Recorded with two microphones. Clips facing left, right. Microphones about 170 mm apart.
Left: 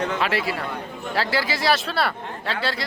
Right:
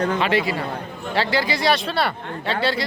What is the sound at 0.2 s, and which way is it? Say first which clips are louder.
Speech: right 3 dB; centre (ahead or behind).